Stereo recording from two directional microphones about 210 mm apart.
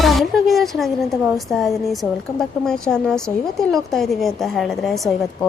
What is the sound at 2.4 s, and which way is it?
A woman's voice, 5° left (ahead or behind).